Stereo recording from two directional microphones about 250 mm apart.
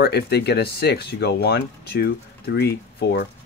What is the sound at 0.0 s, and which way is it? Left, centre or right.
Speech, left.